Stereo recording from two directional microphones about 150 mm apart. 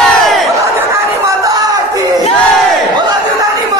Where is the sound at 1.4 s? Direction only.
25° right (ahead or behind).